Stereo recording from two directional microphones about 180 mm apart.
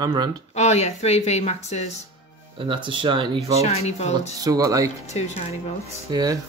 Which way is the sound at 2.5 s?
30° right (ahead or behind).